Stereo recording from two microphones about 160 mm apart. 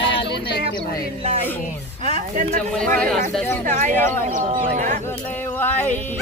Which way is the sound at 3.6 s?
50° right (ahead or behind).